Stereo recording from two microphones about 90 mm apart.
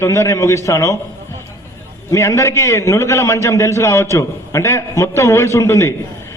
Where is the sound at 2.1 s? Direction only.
30° left (ahead or behind).